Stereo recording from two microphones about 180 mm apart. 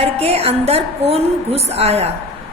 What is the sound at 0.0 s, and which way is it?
A woman's voice, 35° right (ahead or behind).